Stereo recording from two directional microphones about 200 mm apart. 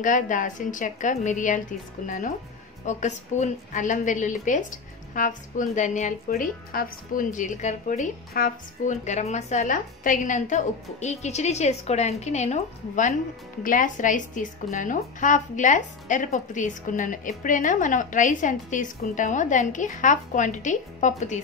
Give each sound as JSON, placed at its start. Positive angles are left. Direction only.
{"t": 0.0, "sound": "a woman's voice", "side_deg": 40}